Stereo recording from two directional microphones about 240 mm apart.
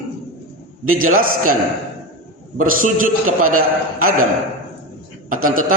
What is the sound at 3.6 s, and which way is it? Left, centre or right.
Speech, right.